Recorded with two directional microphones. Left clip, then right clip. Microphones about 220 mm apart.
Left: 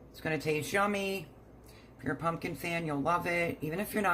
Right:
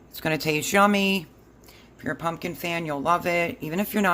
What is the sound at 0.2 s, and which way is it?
Speech, 50° right (ahead or behind).